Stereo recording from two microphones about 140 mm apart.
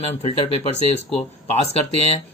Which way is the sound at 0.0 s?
45° left (ahead or behind).